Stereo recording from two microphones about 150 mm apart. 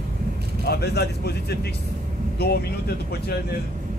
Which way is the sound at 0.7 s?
90° left.